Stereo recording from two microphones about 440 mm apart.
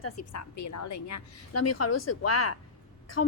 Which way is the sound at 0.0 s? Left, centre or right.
Left.